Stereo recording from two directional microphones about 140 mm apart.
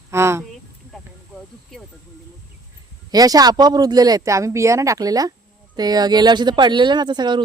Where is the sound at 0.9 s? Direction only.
Centre (ahead or behind).